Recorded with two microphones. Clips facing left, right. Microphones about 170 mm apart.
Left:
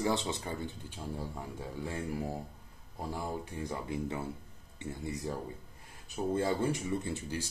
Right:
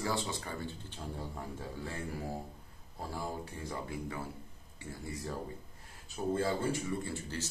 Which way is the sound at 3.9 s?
25° left (ahead or behind).